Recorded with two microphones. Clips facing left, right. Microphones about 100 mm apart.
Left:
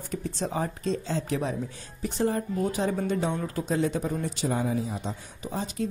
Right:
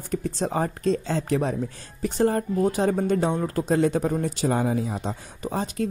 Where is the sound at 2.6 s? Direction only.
40° right (ahead or behind).